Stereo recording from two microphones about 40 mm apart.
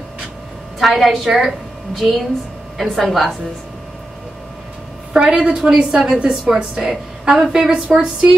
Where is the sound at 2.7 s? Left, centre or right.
Centre.